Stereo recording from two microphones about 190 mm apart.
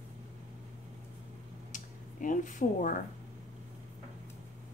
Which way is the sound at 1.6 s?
45° left (ahead or behind).